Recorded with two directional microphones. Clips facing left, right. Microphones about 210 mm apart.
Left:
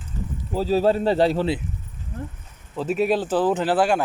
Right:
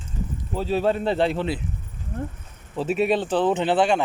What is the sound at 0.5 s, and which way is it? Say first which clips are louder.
Speech: left 3 dB; 35° left (ahead or behind).